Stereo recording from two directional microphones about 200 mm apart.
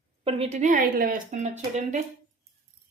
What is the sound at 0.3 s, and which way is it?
A woman's voice, 30° right (ahead or behind).